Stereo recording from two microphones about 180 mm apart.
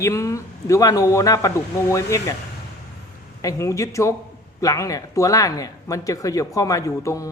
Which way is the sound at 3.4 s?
20° left (ahead or behind).